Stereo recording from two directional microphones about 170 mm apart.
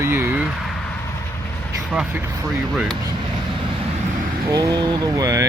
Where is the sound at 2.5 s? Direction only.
Centre (ahead or behind).